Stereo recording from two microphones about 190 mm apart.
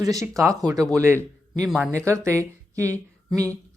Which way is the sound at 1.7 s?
Centre (ahead or behind).